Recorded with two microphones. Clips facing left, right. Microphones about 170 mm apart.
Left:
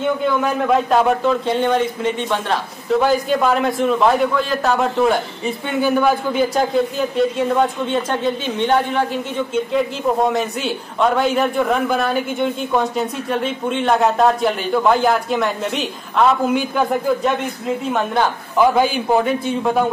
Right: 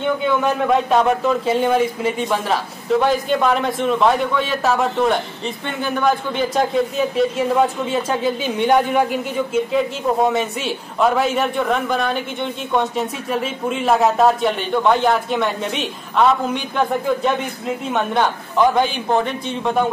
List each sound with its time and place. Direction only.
0.0 s a man's voice: centre (ahead or behind)